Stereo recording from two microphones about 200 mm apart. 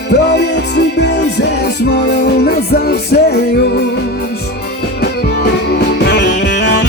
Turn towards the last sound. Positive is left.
turn(degrees=60)  # may be behind; listen again after turning